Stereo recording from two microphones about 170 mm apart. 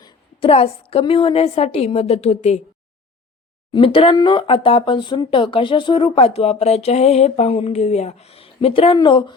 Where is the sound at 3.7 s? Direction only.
30° left (ahead or behind).